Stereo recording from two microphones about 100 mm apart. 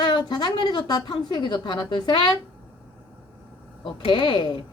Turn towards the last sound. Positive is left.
turn(degrees=55)  # may be behind; listen again after turning